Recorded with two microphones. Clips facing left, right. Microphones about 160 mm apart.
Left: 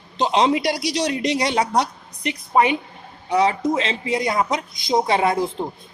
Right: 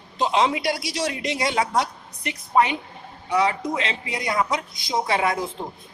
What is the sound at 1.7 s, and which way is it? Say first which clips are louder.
Speech: left 3 dB; 20° left (ahead or behind).